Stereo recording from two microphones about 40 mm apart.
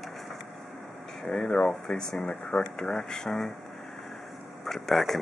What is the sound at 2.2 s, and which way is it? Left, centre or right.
Speech, left.